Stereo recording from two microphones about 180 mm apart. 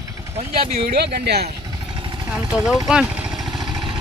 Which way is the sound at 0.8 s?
65° right (ahead or behind).